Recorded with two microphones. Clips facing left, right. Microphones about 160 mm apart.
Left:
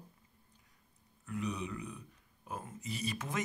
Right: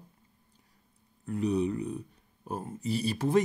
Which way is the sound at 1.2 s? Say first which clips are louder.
Right 10 dB; 35° right (ahead or behind).